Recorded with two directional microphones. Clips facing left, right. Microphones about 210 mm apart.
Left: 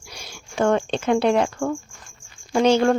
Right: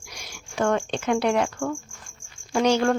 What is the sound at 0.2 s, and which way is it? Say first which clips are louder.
Speech: left 3 dB; 25° left (ahead or behind).